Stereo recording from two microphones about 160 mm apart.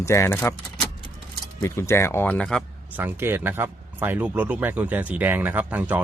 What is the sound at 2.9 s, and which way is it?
Speech, 15° right (ahead or behind).